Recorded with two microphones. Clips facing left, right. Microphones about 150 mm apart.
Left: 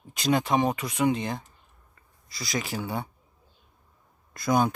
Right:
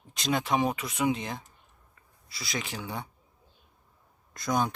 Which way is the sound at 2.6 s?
45° left (ahead or behind).